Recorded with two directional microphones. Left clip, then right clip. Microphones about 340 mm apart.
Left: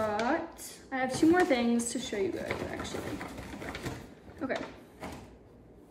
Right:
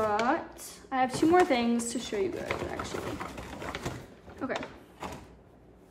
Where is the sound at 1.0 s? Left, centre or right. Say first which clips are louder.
Right 1 dB; centre.